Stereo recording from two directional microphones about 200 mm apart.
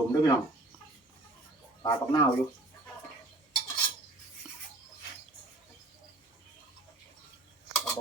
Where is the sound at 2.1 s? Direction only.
20° left (ahead or behind).